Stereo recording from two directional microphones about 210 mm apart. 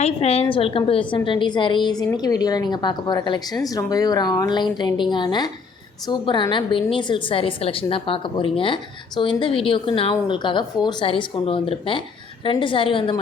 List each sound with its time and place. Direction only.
0.0 s a woman's voice: 30° left (ahead or behind)